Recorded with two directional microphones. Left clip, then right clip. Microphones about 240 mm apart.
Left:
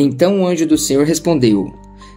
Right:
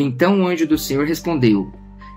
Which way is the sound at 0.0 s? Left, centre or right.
Left.